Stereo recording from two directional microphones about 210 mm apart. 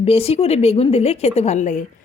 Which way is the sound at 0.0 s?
30° left (ahead or behind).